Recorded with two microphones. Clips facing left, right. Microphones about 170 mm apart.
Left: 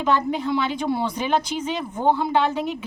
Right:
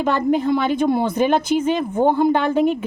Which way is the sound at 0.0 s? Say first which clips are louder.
Right 4 dB; 50° right (ahead or behind).